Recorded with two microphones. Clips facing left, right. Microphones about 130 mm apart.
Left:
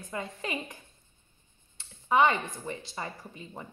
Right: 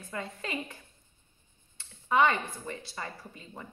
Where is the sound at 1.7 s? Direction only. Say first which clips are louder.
Left 1 dB; 20° left (ahead or behind).